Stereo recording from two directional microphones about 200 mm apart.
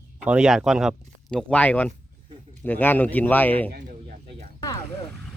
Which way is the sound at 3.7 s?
50° right (ahead or behind).